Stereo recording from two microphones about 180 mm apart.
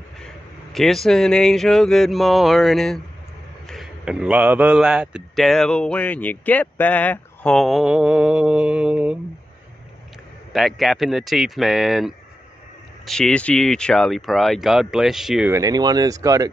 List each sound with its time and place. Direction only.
0.7 s a man's voice: centre (ahead or behind)
10.5 s a man's voice: centre (ahead or behind)
15.5 s speech: 20° right (ahead or behind)